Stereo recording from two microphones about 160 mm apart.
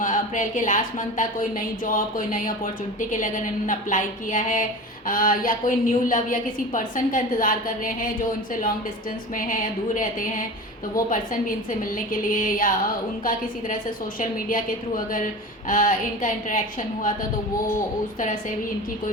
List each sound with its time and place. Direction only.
0.0 s a woman's voice: 55° left (ahead or behind)
9.3 s a woman's voice: 55° left (ahead or behind)
14.2 s a woman's voice: 60° left (ahead or behind)